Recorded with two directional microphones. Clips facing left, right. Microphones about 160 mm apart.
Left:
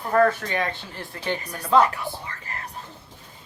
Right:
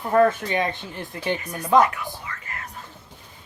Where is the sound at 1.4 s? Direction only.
30° left (ahead or behind).